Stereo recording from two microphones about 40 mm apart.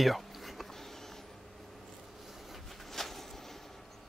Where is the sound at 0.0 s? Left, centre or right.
Centre.